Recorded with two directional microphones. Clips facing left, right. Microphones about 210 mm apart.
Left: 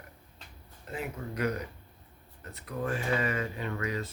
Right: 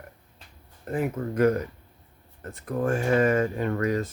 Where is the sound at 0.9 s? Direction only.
50° right (ahead or behind).